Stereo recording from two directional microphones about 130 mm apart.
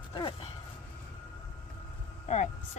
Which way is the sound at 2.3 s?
60° left (ahead or behind).